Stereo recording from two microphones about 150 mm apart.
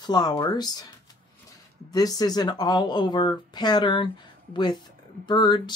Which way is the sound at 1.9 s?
25° left (ahead or behind).